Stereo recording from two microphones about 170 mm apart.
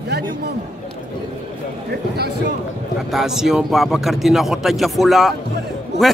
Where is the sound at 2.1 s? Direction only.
70° right (ahead or behind).